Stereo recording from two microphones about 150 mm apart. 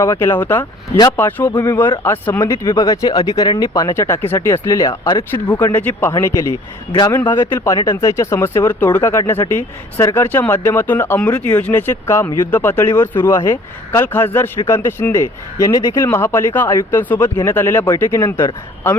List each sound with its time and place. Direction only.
0.0 s speech: 20° left (ahead or behind)
0.6 s speech: 30° left (ahead or behind)
1.1 s speech: 15° left (ahead or behind)